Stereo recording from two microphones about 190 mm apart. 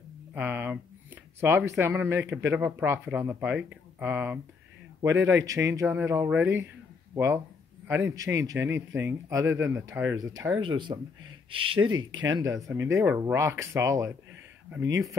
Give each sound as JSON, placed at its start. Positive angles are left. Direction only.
{"t": 0.3, "sound": "speech", "side_deg": -10}
{"t": 7.9, "sound": "speech", "side_deg": -15}